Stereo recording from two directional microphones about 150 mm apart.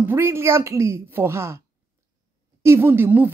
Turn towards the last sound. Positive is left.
turn(degrees=-15)  # may be behind; listen again after turning